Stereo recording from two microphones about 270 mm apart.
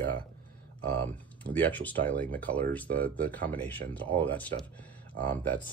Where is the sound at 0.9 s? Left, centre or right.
Centre.